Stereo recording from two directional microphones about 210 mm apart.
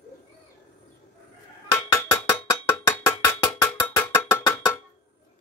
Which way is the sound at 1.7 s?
15° left (ahead or behind).